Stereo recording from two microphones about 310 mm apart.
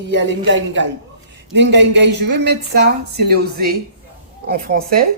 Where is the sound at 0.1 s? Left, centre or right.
Right.